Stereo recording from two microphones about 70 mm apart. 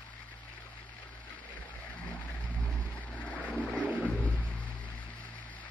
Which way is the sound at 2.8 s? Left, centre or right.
Left.